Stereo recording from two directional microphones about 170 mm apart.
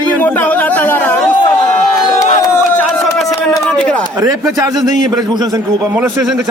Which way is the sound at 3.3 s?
20° left (ahead or behind).